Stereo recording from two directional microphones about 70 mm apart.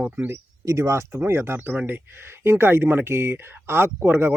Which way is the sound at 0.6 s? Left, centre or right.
Right.